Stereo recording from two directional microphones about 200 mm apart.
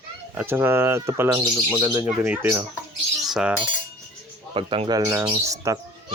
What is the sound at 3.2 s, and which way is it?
Cutlery, 5° right (ahead or behind).